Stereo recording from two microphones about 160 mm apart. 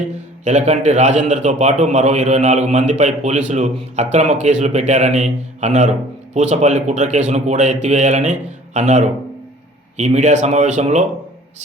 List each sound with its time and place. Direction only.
0.4 s a man's voice: 45° right (ahead or behind)